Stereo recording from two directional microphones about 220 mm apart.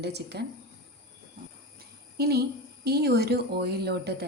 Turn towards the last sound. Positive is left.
turn(degrees=-45)  # may be behind; listen again after turning